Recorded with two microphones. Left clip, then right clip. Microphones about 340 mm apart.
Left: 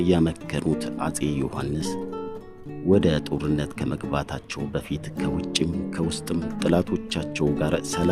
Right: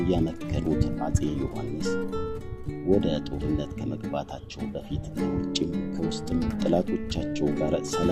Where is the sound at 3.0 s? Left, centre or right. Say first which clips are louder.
Left 5 dB; left.